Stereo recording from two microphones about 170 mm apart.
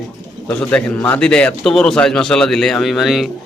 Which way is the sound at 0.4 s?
10° left (ahead or behind).